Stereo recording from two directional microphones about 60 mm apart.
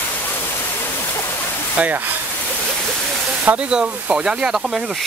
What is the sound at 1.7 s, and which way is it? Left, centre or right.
Speech, right.